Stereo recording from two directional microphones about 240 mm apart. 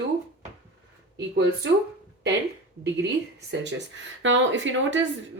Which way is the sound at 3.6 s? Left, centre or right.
Right.